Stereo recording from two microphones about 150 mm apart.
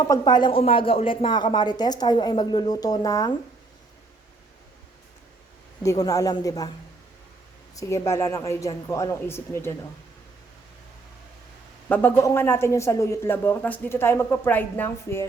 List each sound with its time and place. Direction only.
0.0 s a woman's voice: 25° left (ahead or behind)
5.8 s a woman's voice: 20° left (ahead or behind)
7.8 s a woman's voice: 20° left (ahead or behind)
11.9 s speech: 15° left (ahead or behind)